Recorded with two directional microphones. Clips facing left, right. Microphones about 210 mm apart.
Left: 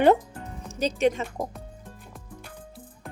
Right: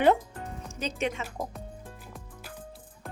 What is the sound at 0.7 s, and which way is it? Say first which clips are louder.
Speech: left 8 dB; 35° left (ahead or behind).